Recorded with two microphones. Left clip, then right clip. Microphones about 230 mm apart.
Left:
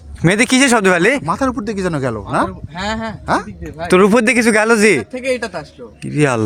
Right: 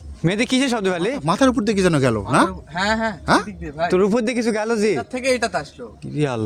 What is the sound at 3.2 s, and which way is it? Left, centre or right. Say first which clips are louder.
Speech: left 1 dB; right.